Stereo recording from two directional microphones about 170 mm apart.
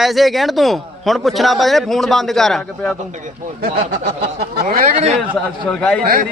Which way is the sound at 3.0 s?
45° right (ahead or behind).